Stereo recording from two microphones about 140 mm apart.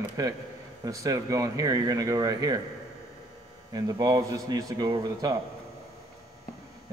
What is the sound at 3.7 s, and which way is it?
Speech, 25° right (ahead or behind).